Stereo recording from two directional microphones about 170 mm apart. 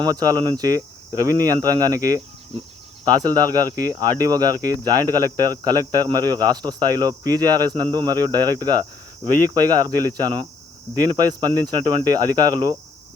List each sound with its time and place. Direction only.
0.0 s speech: 25° right (ahead or behind)